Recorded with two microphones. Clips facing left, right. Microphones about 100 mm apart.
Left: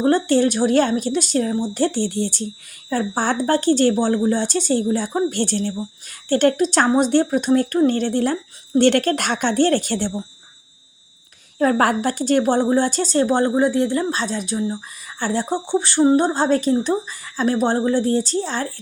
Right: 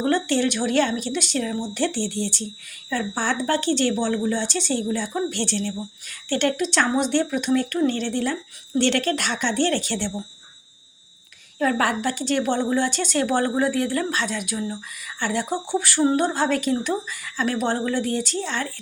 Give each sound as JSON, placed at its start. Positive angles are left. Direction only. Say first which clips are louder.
{"t": 0.0, "sound": "speech", "louder": "left 5 dB", "side_deg": 40}
{"t": 11.6, "sound": "speech", "louder": "left 4 dB", "side_deg": 45}